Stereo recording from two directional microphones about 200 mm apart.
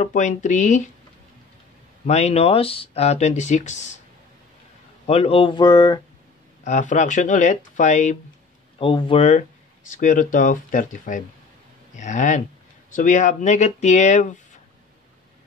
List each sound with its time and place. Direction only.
0.0 s speech: 35° left (ahead or behind)
2.0 s speech: 35° left (ahead or behind)
5.0 s speech: 30° left (ahead or behind)
6.6 s speech: 40° left (ahead or behind)
8.7 s speech: 25° left (ahead or behind)
9.8 s speech: 40° left (ahead or behind)